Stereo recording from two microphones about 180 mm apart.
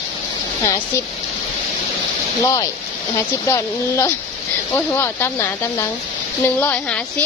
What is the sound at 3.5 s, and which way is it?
Speech, 15° left (ahead or behind).